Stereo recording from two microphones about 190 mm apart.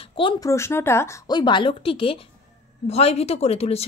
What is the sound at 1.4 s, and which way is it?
A woman's voice, 25° left (ahead or behind).